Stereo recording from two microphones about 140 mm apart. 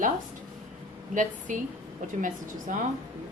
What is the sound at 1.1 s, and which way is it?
A woman's voice, 65° right (ahead or behind).